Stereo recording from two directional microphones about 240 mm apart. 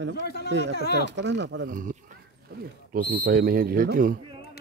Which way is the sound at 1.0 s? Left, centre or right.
Right.